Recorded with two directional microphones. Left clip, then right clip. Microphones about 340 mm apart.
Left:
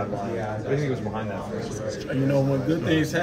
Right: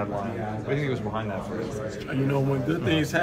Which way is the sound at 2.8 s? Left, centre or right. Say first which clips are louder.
Right 1 dB; centre.